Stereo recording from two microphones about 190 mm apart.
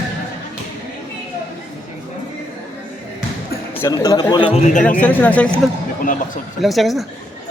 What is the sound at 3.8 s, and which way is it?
Speech, 15° left (ahead or behind).